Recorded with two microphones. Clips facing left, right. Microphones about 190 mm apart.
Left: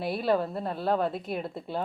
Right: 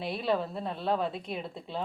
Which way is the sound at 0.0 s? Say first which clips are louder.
Left 3 dB; centre (ahead or behind).